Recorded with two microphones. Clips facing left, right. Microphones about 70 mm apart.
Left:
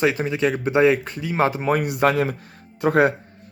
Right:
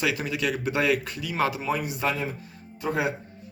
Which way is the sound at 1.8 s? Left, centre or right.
Left.